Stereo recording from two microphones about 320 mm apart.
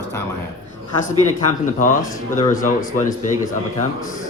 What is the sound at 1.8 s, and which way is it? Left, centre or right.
Speech, left.